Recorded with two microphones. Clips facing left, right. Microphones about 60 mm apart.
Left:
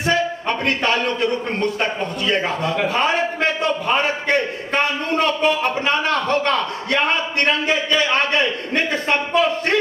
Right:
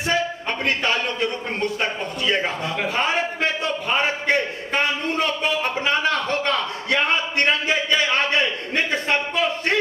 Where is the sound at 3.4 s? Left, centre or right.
Left.